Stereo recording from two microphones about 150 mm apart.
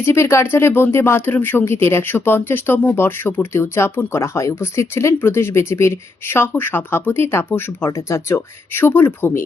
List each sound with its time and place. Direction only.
0.0 s speech: 15° left (ahead or behind)